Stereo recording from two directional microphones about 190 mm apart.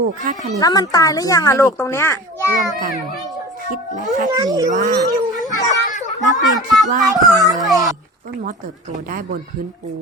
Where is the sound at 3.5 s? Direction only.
45° right (ahead or behind).